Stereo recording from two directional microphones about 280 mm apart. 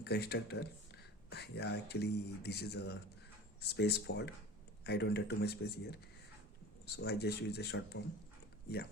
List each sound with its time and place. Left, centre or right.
0.0 s speech: left